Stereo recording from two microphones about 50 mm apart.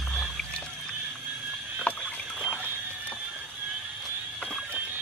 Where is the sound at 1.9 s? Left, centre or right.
Left.